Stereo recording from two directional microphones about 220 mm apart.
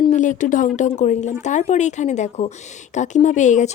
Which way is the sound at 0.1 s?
35° left (ahead or behind).